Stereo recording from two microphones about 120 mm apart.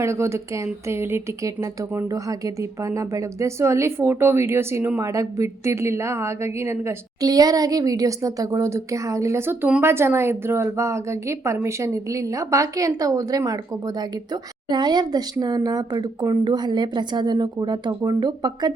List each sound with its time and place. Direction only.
0.0 s speech: 25° right (ahead or behind)